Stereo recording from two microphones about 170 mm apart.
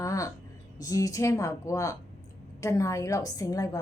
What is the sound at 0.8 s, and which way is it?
A woman's voice, 20° left (ahead or behind).